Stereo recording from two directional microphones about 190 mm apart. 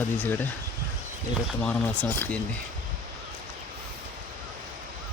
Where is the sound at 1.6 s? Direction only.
5° left (ahead or behind).